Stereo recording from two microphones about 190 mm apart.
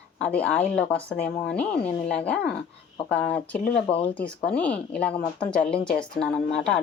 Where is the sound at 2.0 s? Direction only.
5° left (ahead or behind).